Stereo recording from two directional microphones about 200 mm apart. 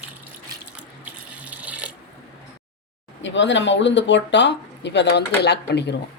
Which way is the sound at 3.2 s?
65° left (ahead or behind).